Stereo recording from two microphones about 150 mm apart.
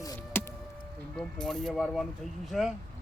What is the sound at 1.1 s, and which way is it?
Speech, 5° left (ahead or behind).